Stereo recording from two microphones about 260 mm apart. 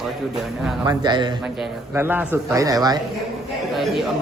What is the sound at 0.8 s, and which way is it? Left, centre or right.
Speech, centre.